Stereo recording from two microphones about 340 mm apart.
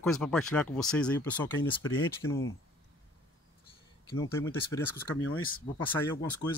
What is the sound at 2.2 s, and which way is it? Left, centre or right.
Speech, left.